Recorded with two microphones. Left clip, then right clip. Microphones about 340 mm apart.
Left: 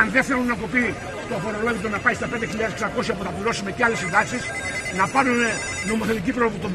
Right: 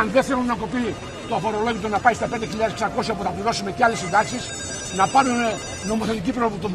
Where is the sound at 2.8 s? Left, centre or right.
Centre.